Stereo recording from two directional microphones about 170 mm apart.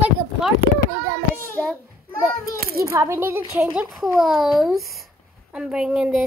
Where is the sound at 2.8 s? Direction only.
15° right (ahead or behind).